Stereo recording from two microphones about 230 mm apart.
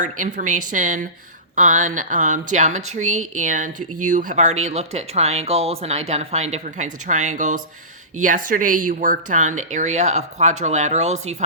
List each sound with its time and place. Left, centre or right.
0.0 s speech: right